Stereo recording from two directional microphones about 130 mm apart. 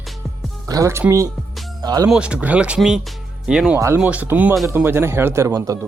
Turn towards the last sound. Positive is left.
turn(degrees=-25)  # may be behind; listen again after turning